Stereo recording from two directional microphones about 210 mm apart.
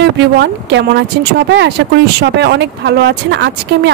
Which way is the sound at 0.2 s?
55° right (ahead or behind).